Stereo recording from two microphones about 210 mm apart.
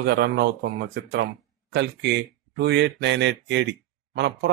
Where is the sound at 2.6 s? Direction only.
55° right (ahead or behind).